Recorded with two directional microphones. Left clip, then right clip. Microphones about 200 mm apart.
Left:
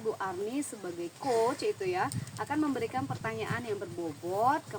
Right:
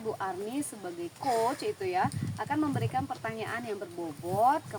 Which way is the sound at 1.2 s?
20° right (ahead or behind).